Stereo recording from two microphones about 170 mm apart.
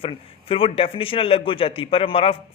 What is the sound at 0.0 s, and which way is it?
A man's voice, 35° left (ahead or behind).